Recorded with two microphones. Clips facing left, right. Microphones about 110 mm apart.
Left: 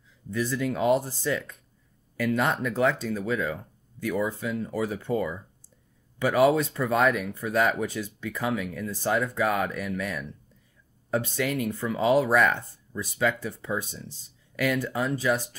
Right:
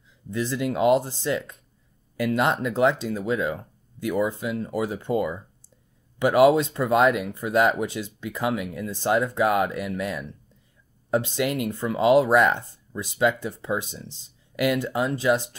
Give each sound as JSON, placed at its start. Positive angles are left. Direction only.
{"t": 0.4, "sound": "speech", "side_deg": -20}